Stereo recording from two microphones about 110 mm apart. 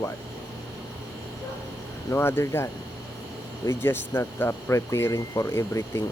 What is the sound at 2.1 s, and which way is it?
Speech, 20° left (ahead or behind).